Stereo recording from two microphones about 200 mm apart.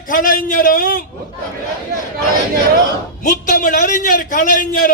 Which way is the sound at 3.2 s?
40° left (ahead or behind).